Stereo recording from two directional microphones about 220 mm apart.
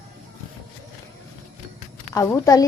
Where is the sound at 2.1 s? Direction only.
15° left (ahead or behind).